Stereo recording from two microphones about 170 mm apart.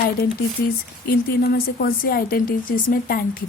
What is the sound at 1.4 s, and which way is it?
A woman's voice, 65° left (ahead or behind).